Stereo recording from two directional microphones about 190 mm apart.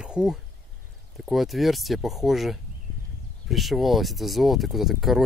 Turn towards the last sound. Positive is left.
turn(degrees=0)  # may be behind; listen again after turning